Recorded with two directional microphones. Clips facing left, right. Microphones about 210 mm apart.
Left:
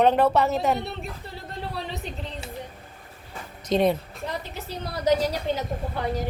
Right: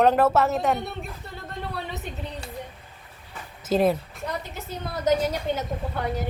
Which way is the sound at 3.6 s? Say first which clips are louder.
Even; 5° right (ahead or behind).